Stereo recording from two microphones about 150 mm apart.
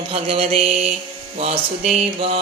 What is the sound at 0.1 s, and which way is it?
Music, 40° right (ahead or behind).